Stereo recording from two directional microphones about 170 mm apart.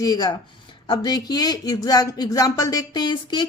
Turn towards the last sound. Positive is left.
turn(degrees=25)  # may be behind; listen again after turning